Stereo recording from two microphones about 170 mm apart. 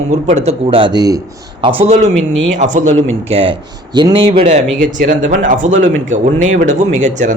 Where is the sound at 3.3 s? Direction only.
30° right (ahead or behind).